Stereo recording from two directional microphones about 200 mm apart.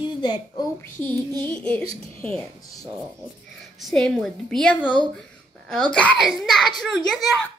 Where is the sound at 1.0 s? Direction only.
20° right (ahead or behind).